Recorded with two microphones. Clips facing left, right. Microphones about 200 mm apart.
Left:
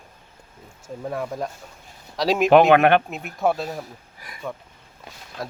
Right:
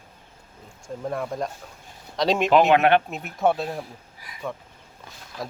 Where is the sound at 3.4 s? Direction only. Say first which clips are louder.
Even; centre (ahead or behind).